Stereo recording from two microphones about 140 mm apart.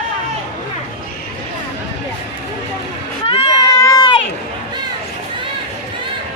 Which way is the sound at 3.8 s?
25° left (ahead or behind).